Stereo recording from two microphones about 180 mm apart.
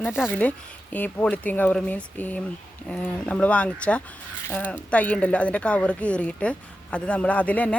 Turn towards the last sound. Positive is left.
turn(degrees=10)  # may be behind; listen again after turning